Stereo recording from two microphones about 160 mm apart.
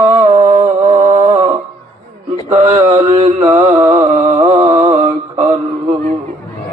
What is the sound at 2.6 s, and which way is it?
Mantra, 35° right (ahead or behind).